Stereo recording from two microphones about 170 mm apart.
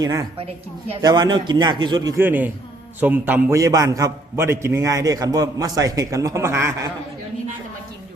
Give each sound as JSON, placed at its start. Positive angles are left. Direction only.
{"t": 0.0, "sound": "a man's voice", "side_deg": -20}